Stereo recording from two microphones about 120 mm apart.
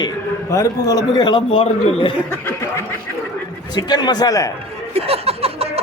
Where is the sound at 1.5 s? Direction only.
45° left (ahead or behind).